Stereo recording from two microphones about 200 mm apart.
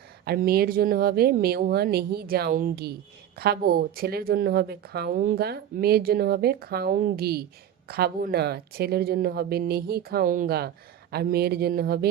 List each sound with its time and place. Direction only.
0.3 s a woman's voice: 50° right (ahead or behind)